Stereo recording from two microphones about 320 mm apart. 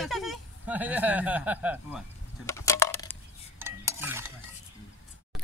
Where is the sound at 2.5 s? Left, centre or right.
Centre.